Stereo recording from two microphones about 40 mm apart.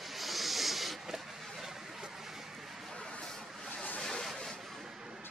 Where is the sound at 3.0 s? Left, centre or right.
Left.